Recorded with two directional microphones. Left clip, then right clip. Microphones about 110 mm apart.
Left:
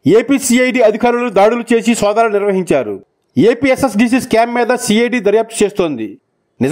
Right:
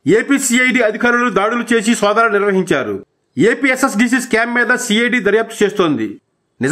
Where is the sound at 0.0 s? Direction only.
40° left (ahead or behind).